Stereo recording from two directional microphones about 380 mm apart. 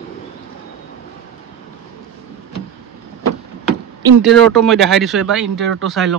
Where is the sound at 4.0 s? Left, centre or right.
Centre.